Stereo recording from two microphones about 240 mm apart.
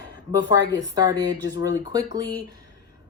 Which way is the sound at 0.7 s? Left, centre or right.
Centre.